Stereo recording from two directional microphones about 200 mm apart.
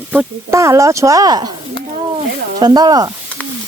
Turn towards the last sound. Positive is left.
turn(degrees=-20)  # may be behind; listen again after turning